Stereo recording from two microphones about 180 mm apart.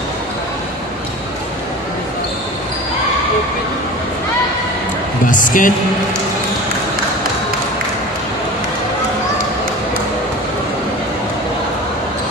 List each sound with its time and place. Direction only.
5.3 s a woman's voice: 50° left (ahead or behind)